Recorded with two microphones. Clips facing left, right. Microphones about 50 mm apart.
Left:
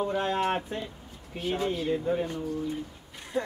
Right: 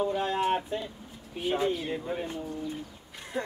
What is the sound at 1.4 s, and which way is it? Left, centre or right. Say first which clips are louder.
Speech: right 1 dB; centre.